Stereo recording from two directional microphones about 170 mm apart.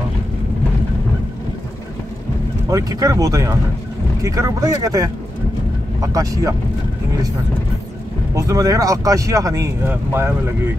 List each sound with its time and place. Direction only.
2.7 s speech: 20° right (ahead or behind)
8.4 s speech: 20° right (ahead or behind)